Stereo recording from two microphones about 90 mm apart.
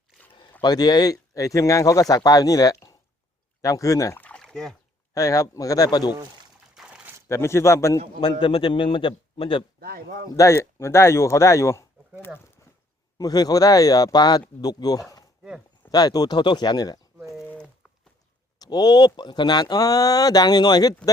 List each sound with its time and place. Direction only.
0.6 s speech: 50° left (ahead or behind)
4.2 s rowboat: 10° left (ahead or behind)
5.1 s speech: 40° left (ahead or behind)
6.7 s a sound: 10° right (ahead or behind)
7.3 s speech: 30° left (ahead or behind)
7.9 s a man's voice: 60° left (ahead or behind); by 9.6 s 80° left
10.3 s speech: 35° left (ahead or behind)
13.1 s speech: 45° left (ahead or behind)
16.4 s speech: 60° left (ahead or behind)
18.6 s speech: 45° left (ahead or behind)